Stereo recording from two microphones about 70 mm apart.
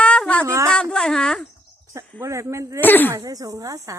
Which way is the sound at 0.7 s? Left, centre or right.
Centre.